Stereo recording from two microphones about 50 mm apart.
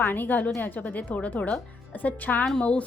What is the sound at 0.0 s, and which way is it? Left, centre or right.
A woman's voice, left.